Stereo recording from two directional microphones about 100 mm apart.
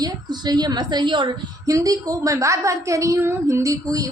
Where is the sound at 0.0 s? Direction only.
45° right (ahead or behind).